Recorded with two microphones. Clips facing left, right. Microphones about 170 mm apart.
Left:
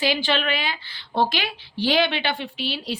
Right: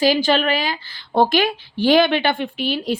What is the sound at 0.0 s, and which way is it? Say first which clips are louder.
A woman's voice: right 6 dB; 40° right (ahead or behind).